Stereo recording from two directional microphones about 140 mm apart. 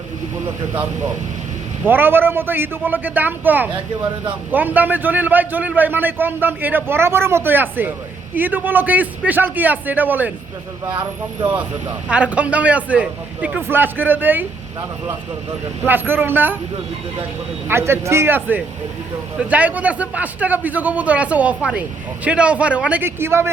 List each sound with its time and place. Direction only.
0.4 s speech: 20° right (ahead or behind)
12.0 s speech: 10° right (ahead or behind)
15.8 s speech: 15° right (ahead or behind)
17.7 s speech: 15° right (ahead or behind)